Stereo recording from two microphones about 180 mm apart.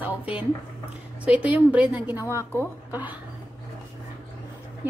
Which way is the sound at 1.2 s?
10° right (ahead or behind).